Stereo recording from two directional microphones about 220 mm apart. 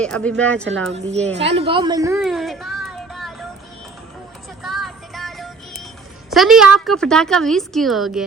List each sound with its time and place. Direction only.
0.0 s a woman's voice: 5° left (ahead or behind)
1.5 s a woman's voice: 25° right (ahead or behind)
2.1 s a sound: centre (ahead or behind)
4.6 s music: centre (ahead or behind)
6.3 s a woman's voice: centre (ahead or behind)